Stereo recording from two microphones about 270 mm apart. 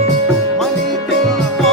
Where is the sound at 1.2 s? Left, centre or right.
Centre.